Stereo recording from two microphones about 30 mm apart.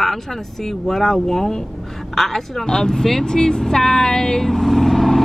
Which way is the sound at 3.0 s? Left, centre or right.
Centre.